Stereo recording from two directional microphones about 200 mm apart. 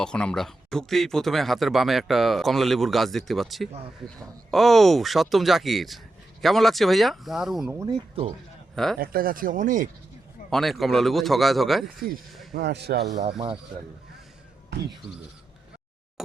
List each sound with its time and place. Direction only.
0.0 s speech: 5° left (ahead or behind)
7.7 s speech: 15° right (ahead or behind)
8.7 s speech: centre (ahead or behind)
9.0 s speech: 45° right (ahead or behind)
10.5 s speech: centre (ahead or behind)
12.5 s speech: 55° right (ahead or behind)